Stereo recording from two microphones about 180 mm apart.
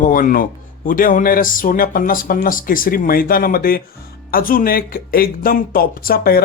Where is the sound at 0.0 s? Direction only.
50° left (ahead or behind).